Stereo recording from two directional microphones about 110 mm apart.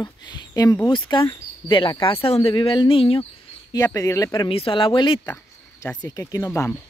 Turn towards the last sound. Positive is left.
turn(degrees=30)  # may be behind; listen again after turning